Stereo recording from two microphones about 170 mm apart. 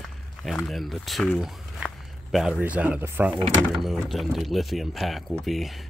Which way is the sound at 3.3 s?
30° right (ahead or behind).